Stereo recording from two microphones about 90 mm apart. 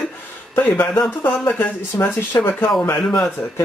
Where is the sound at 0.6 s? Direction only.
20° left (ahead or behind).